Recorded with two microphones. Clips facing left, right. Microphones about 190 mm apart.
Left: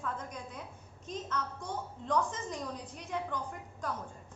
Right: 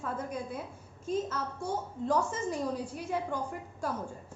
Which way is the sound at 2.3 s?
5° right (ahead or behind).